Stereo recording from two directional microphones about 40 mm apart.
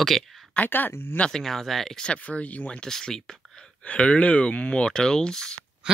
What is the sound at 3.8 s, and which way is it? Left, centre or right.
Speech, left.